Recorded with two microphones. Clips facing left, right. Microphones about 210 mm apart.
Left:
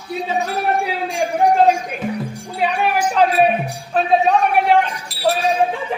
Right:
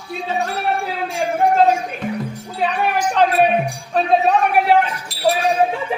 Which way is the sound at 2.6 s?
5° left (ahead or behind).